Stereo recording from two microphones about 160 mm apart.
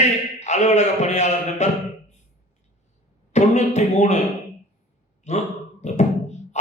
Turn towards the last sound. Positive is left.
turn(degrees=45)  # may be behind; listen again after turning